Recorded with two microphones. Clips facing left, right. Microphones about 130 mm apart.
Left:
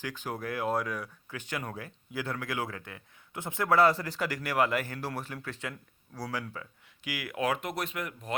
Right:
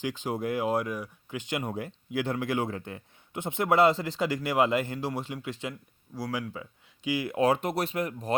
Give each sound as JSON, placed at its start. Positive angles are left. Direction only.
{"t": 0.0, "sound": "a man's voice", "side_deg": -20}